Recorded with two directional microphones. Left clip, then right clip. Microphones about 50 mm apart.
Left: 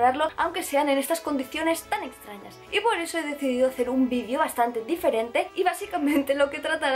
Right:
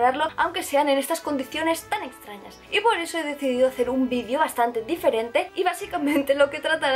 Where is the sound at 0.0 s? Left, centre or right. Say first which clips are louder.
Right 1 dB; centre.